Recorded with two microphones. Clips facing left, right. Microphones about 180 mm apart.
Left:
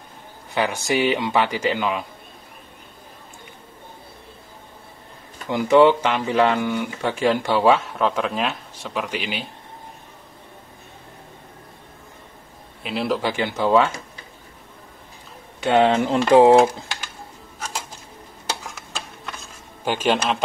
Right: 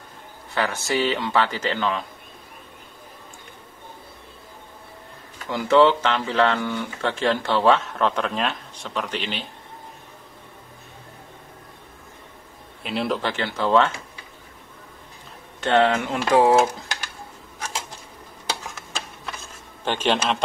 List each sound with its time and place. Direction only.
0.6 s speech: 15° left (ahead or behind)
5.5 s speech: 15° left (ahead or behind)
12.8 s a man's voice: centre (ahead or behind)
13.2 s speech: 15° left (ahead or behind)
15.6 s speech: 10° left (ahead or behind)
15.9 s speech: 30° left (ahead or behind)
19.2 s a sound: centre (ahead or behind)